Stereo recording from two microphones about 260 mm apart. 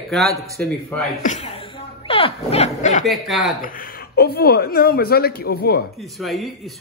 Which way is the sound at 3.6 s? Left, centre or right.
Left.